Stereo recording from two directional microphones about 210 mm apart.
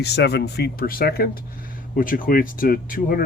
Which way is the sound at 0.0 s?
50° left (ahead or behind).